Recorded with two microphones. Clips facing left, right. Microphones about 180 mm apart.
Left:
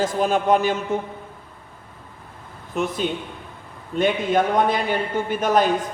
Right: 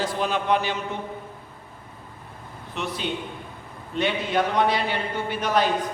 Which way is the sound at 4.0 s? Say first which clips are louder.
Left 4 dB; 45° left (ahead or behind).